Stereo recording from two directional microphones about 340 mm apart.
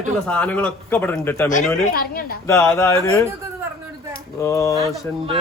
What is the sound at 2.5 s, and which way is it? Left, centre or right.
Speech, centre.